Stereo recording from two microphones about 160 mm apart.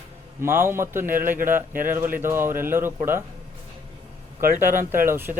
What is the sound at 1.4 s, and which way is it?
A man's voice, 15° right (ahead or behind).